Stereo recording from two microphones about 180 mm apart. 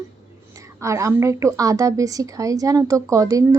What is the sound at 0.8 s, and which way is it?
A woman's voice, 15° right (ahead or behind).